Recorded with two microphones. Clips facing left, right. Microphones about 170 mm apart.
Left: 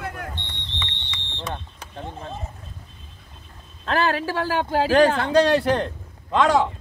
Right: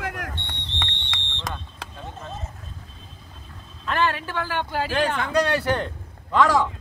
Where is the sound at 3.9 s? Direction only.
35° left (ahead or behind).